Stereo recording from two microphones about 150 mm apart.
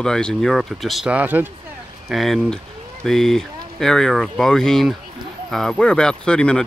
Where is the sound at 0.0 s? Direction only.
5° left (ahead or behind); by 1.5 s 10° right (ahead or behind).